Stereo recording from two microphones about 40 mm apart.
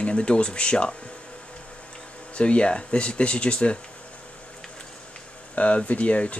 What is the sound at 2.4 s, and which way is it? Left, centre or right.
Speech, left.